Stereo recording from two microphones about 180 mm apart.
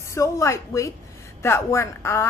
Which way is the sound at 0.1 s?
15° left (ahead or behind).